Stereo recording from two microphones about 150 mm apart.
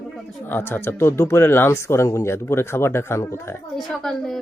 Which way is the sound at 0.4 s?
15° left (ahead or behind).